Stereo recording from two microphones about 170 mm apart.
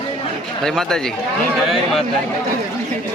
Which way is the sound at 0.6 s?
5° left (ahead or behind).